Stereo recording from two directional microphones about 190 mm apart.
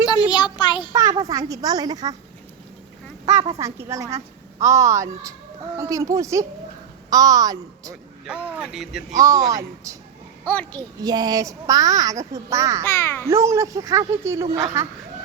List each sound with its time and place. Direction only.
0.1 s speech: 20° left (ahead or behind)
1.2 s a woman's voice: 20° right (ahead or behind)
3.6 s a child's voice: 15° right (ahead or behind)
8.3 s speech: 5° right (ahead or behind)
9.1 s a child's voice: 20° right (ahead or behind)
10.4 s a child's voice: 5° left (ahead or behind)
10.8 s a child's voice: 20° right (ahead or behind)
12.8 s a child's voice: 10° left (ahead or behind)
13.2 s a child's voice: 15° right (ahead or behind)